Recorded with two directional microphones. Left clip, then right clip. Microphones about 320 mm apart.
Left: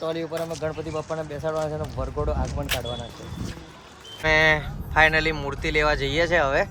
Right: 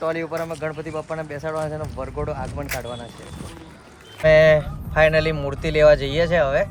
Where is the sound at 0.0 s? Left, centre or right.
Centre.